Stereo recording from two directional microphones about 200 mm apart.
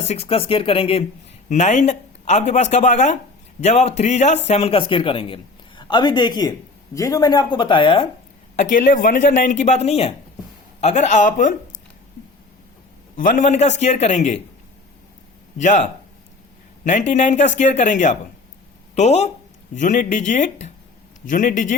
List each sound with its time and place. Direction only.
0.0 s a woman's voice: 30° left (ahead or behind)
8.7 s speech: 45° left (ahead or behind)
13.1 s speech: 40° left (ahead or behind)
15.5 s speech: 40° left (ahead or behind)